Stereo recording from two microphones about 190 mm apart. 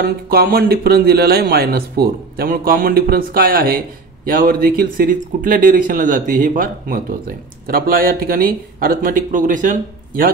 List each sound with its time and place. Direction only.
0.0 s speech: 55° right (ahead or behind)